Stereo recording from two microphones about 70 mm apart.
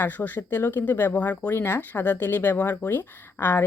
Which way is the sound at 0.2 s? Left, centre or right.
Left.